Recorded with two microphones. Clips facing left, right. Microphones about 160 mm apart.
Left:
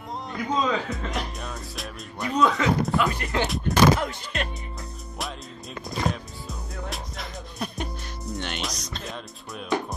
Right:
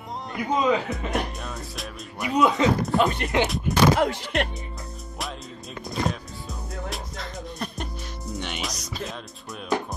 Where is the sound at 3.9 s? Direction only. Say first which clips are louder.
Right 6 dB; 75° right (ahead or behind).